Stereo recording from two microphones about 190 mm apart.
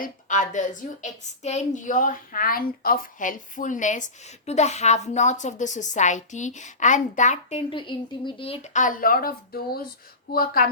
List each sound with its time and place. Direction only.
0.0 s a woman's voice: 40° left (ahead or behind)
7.7 s a woman's voice: 25° left (ahead or behind); by 10.7 s 50° left (ahead or behind)